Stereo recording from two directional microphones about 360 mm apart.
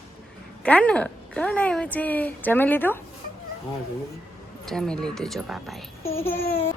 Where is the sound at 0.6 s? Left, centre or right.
Centre.